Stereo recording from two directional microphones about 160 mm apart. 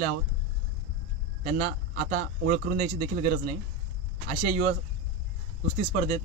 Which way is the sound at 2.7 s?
55° right (ahead or behind).